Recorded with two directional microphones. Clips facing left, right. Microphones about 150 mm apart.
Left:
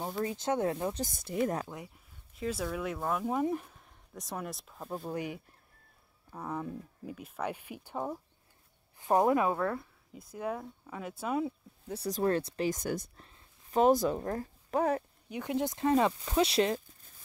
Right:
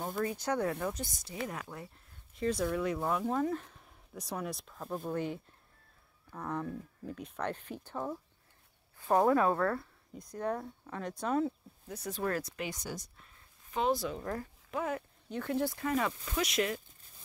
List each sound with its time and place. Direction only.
0.2 s speech: 25° left (ahead or behind)
1.0 s speech: 55° left (ahead or behind)
1.7 s speech: 20° left (ahead or behind)
2.3 s speech: 5° left (ahead or behind)
3.3 s speech: 15° left (ahead or behind)
3.7 s speech: centre (ahead or behind)
11.9 s speech: 35° left (ahead or behind)
12.6 s speech: 50° left (ahead or behind)
15.2 s speech: 15° left (ahead or behind); by 16.8 s 30° left (ahead or behind)